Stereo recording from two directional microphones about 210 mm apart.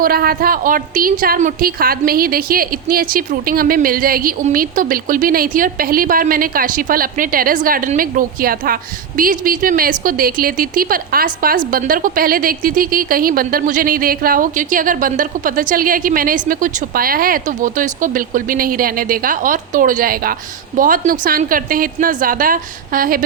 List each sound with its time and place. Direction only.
0.0 s a woman's voice: 45° right (ahead or behind)